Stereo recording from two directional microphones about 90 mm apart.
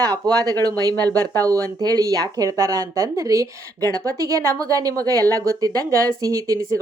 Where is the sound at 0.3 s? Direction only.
45° right (ahead or behind).